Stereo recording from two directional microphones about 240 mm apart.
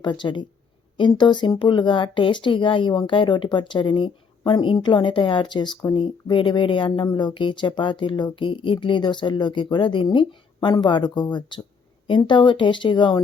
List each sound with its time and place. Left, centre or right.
0.0 s speech: centre